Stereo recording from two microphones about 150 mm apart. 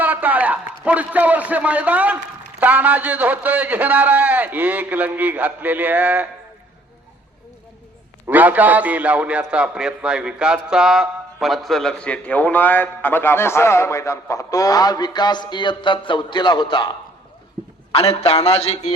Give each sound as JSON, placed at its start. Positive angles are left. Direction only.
{"t": 0.0, "sound": "a man's voice", "side_deg": -10}
{"t": 8.3, "sound": "a man's voice", "side_deg": -10}
{"t": 17.9, "sound": "a man's voice", "side_deg": 45}